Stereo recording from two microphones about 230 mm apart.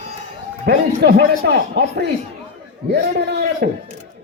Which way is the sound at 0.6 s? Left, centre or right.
Right.